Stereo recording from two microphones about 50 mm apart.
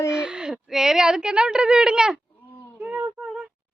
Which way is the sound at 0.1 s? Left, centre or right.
Centre.